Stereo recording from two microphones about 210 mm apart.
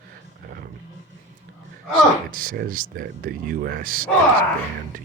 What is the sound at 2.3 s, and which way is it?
Speech, 45° right (ahead or behind).